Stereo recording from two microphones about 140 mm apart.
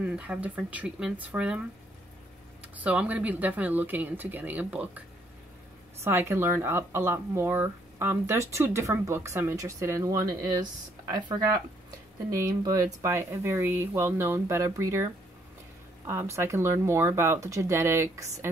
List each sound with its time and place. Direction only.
0.0 s speech: 10° right (ahead or behind)
2.7 s speech: 10° right (ahead or behind)
6.0 s speech: 15° right (ahead or behind)
16.1 s speech: 20° right (ahead or behind)